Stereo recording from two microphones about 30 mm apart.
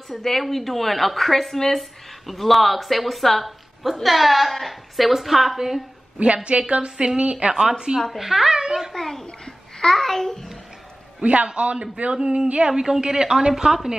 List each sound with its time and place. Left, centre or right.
0.2 s speech: centre
6.1 s a woman's voice: right
8.2 s a child's voice: centre
8.5 s a child's voice: right
8.9 s a child's voice: centre
11.4 s a man's voice: right
12.1 s a sound: right
13.5 s a child's voice: centre